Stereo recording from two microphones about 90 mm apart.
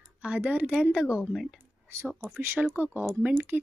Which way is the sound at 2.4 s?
25° right (ahead or behind).